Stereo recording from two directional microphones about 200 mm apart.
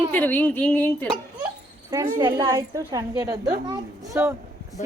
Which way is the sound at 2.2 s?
20° right (ahead or behind).